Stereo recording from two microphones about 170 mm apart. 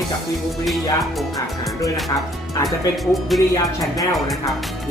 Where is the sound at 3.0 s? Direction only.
Centre (ahead or behind).